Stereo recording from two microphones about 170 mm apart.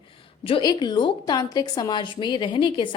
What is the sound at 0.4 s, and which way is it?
A woman's voice, 30° left (ahead or behind).